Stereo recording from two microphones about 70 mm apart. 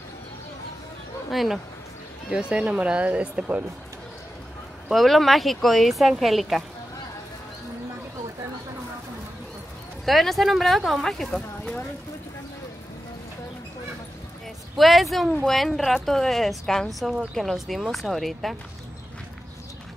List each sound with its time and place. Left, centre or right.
1.3 s speech: centre
2.5 s speech: centre
4.8 s speech: centre
10.0 s speech: centre
14.8 s speech: centre